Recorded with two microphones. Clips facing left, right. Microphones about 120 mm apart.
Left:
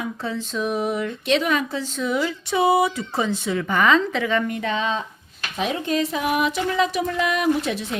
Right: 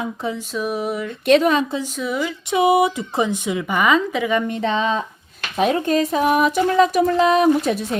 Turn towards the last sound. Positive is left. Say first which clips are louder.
# right 5 dB
turn(degrees=-40)  # may be behind; listen again after turning